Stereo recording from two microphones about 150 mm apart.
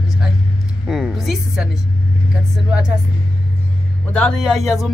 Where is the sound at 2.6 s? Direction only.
5° right (ahead or behind).